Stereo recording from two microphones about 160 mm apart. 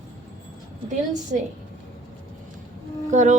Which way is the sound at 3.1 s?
50° right (ahead or behind).